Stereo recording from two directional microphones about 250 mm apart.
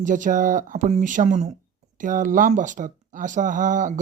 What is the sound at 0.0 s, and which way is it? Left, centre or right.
A man's voice, right.